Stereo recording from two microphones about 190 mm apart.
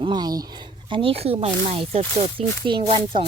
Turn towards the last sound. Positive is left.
turn(degrees=-25)  # may be behind; listen again after turning